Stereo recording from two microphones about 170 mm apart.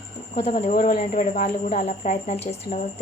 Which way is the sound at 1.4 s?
45° left (ahead or behind).